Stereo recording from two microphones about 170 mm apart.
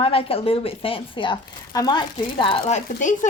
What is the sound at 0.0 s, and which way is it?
A woman's voice, 35° left (ahead or behind).